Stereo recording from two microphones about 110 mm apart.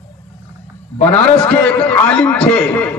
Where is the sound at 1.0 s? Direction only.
10° left (ahead or behind).